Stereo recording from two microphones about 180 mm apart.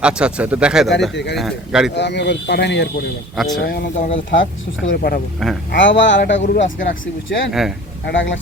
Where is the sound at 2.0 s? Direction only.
75° left (ahead or behind).